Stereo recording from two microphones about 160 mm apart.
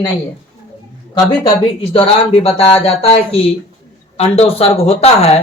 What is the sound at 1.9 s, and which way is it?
Speech, 35° left (ahead or behind).